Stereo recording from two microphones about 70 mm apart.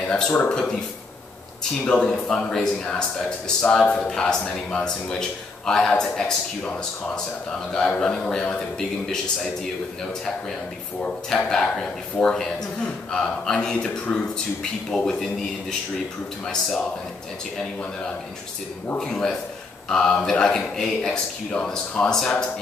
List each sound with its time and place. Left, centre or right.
0.0 s speech: centre
11.2 s speech: centre
18.9 s speech: centre